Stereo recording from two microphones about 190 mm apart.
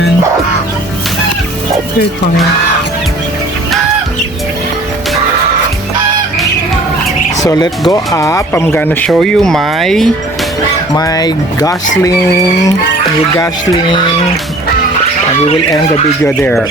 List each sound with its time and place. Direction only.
7.4 s speech: 20° left (ahead or behind); by 10.1 s centre (ahead or behind)
10.9 s speech: 20° left (ahead or behind)
16.2 s speech: 10° left (ahead or behind)